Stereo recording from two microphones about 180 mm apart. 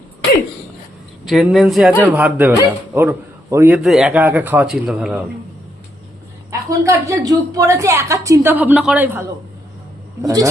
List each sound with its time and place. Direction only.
1.2 s a woman's voice: centre (ahead or behind)
3.8 s a woman's voice: 5° right (ahead or behind)
6.5 s a woman's voice: 15° right (ahead or behind)
10.2 s speech: 20° right (ahead or behind)